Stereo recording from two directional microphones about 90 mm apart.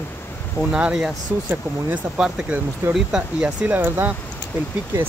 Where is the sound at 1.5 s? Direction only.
15° right (ahead or behind).